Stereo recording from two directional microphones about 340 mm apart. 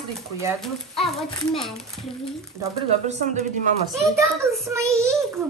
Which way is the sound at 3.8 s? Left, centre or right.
Centre.